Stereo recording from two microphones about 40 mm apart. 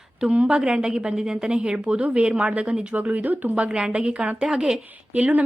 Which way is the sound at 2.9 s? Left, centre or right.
Right.